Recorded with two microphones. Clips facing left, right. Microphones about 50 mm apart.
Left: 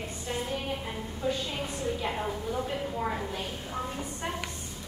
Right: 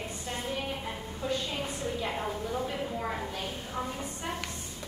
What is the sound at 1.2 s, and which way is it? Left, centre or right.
A woman's voice, centre.